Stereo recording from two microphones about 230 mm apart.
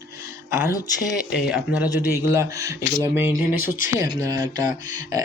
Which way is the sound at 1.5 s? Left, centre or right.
Centre.